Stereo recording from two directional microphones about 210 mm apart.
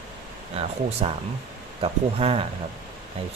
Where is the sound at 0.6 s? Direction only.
30° right (ahead or behind).